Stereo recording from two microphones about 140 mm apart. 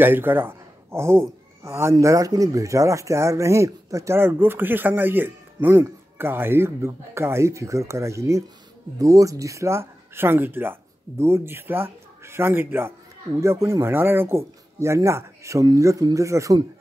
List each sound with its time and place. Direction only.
0.0 s a man's voice: 15° right (ahead or behind)